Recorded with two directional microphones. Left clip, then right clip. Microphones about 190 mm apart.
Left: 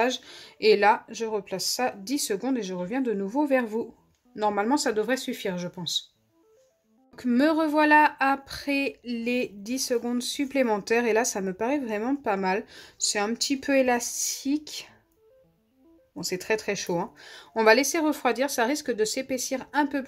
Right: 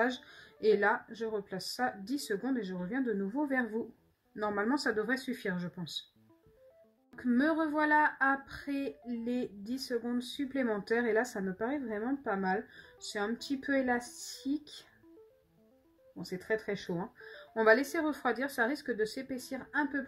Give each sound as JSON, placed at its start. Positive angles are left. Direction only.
{"t": 0.0, "sound": "speech", "side_deg": 35}
{"t": 7.2, "sound": "speech", "side_deg": 40}
{"t": 16.3, "sound": "speech", "side_deg": 45}